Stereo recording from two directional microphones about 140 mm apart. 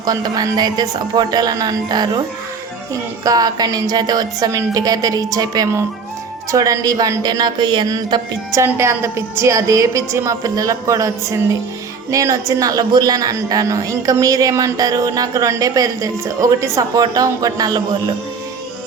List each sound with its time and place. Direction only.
0.0 s a woman's voice: 30° right (ahead or behind)
8.6 s a woman's voice: 20° right (ahead or behind)